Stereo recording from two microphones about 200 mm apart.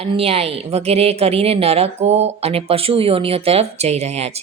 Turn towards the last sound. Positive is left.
turn(degrees=-30)  # may be behind; listen again after turning